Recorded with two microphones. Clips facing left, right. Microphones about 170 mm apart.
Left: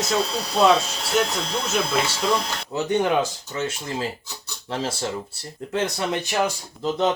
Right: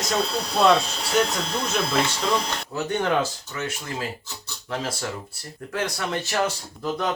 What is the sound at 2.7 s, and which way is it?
Speech, 15° left (ahead or behind).